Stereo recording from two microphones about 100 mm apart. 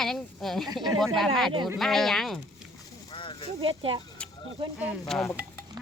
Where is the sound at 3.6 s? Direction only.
60° right (ahead or behind).